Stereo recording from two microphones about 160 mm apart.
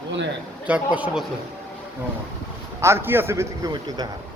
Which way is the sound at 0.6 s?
10° right (ahead or behind).